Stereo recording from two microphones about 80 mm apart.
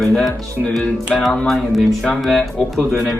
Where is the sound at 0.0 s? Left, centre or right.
Centre.